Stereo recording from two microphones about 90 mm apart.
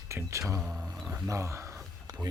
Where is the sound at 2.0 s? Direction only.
45° right (ahead or behind).